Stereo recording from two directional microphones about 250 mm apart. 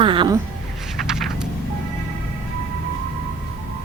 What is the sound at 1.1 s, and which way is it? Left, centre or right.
Vehicle, centre.